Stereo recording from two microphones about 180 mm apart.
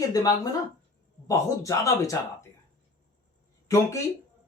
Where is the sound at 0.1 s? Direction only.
20° left (ahead or behind).